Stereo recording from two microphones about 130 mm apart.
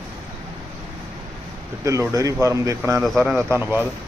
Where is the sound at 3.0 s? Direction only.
Centre (ahead or behind).